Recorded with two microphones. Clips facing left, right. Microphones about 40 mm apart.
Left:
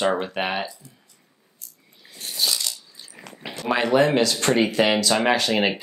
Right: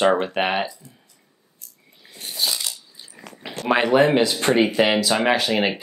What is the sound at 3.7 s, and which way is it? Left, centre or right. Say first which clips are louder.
Speech: right 3 dB; centre.